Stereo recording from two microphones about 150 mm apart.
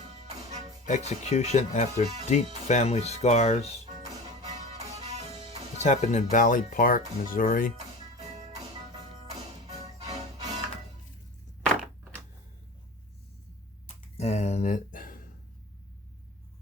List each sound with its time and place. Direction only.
0.1 s music: 50° right (ahead or behind)
0.9 s speech: 50° left (ahead or behind)
4.4 s music: 45° right (ahead or behind)
5.7 s speech: 50° left (ahead or behind); by 7.7 s 65° left (ahead or behind)
8.2 s music: 45° right (ahead or behind)
9.8 s music: 45° right (ahead or behind)
13.8 s a sound: 45° left (ahead or behind); by 15.3 s 70° left (ahead or behind)